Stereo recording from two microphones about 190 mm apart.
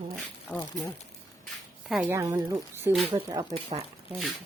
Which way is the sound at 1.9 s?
5° right (ahead or behind).